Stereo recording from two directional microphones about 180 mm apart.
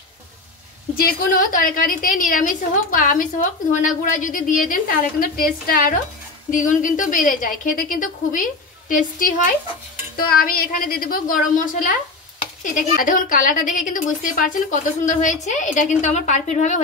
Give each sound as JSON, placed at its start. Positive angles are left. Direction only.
{"t": 0.9, "sound": "a woman's voice", "side_deg": 50}